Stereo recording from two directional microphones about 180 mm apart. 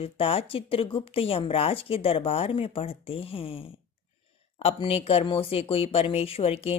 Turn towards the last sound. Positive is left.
turn(degrees=35)  # may be behind; listen again after turning